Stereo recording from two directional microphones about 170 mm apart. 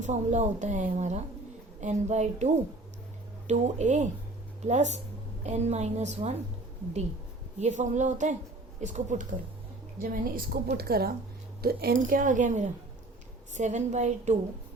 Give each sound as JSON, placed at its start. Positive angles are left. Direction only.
{"t": 0.0, "sound": "a woman's voice", "side_deg": -45}
{"t": 7.6, "sound": "a woman's voice", "side_deg": -45}
{"t": 10.0, "sound": "a woman's voice", "side_deg": -60}
{"t": 11.9, "sound": "a woman's voice", "side_deg": -50}